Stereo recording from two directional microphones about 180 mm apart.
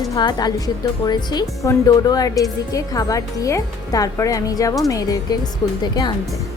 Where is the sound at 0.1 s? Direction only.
25° left (ahead or behind).